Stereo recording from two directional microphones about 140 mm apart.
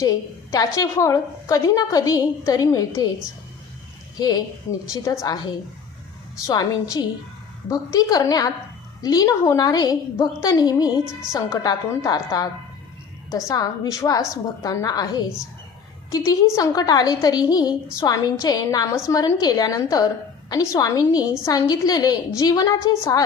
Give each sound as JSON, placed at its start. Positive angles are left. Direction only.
{"t": 0.0, "sound": "a woman's voice", "side_deg": 25}
{"t": 4.2, "sound": "a woman's voice", "side_deg": 30}
{"t": 13.5, "sound": "a woman's voice", "side_deg": 25}